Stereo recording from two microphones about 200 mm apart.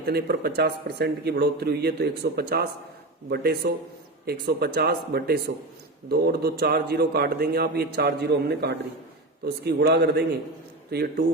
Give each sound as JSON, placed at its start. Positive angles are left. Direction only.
{"t": 0.0, "sound": "a man's voice", "side_deg": -50}